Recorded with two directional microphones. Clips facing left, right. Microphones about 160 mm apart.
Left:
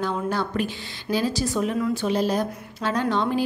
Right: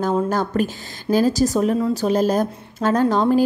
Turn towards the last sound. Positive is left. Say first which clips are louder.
# right 7 dB
turn(degrees=-40)  # may be behind; listen again after turning